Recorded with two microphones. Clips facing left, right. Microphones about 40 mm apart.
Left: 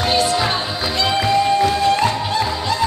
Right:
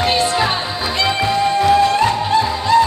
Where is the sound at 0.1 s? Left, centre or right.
Right.